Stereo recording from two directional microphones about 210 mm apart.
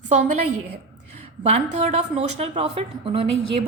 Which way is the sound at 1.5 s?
30° right (ahead or behind).